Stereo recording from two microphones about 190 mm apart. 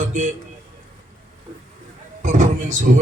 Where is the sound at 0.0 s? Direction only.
40° right (ahead or behind).